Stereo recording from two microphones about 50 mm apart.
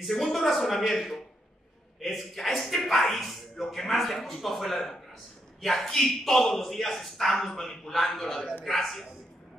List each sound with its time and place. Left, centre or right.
0.0 s speech: centre